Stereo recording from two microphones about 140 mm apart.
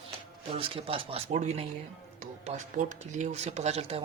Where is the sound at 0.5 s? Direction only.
40° right (ahead or behind).